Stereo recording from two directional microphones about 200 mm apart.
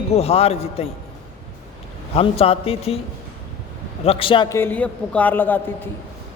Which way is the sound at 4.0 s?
30° left (ahead or behind).